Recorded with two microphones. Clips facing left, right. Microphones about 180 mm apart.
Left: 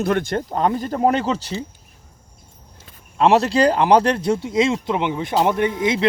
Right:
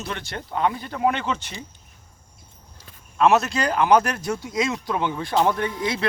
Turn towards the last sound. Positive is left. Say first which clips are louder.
# left 6 dB
turn(degrees=20)  # may be behind; listen again after turning